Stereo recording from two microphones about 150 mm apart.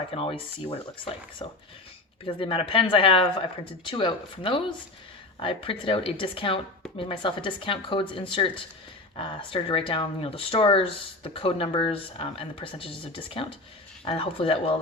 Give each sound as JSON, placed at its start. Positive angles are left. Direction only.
{"t": 0.1, "sound": "speech", "side_deg": 40}